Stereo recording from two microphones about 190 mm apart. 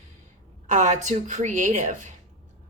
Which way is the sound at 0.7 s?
40° right (ahead or behind).